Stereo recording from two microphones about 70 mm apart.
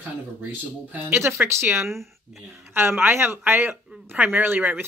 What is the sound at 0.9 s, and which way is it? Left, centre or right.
A woman's voice, right.